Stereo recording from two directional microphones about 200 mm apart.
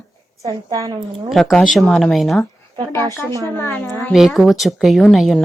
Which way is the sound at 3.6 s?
10° left (ahead or behind).